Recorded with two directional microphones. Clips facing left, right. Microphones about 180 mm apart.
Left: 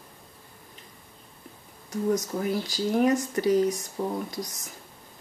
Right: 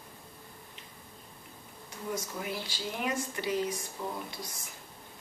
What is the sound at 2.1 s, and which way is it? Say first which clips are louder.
Speech: left 9 dB; 40° left (ahead or behind).